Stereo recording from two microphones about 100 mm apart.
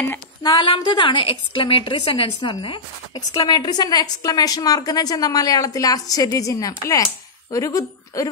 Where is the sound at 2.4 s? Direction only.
55° left (ahead or behind).